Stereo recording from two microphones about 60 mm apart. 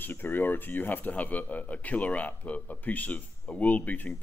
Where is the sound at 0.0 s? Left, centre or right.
Left.